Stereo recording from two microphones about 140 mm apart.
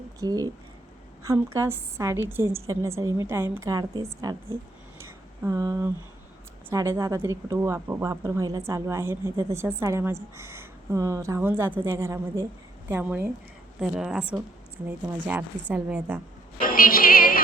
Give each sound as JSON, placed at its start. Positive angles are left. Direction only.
{"t": 0.2, "sound": "a woman's voice", "side_deg": -25}
{"t": 4.9, "sound": "a sound", "side_deg": -20}
{"t": 6.7, "sound": "a woman's voice", "side_deg": -20}
{"t": 16.6, "sound": "music", "side_deg": 90}